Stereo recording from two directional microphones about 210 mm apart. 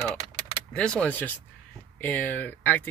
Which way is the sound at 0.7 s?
5° left (ahead or behind).